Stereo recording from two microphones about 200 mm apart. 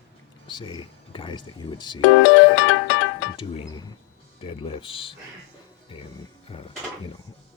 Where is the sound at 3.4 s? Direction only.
25° left (ahead or behind).